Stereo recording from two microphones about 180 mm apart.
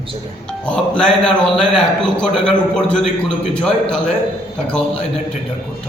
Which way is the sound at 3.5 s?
5° left (ahead or behind).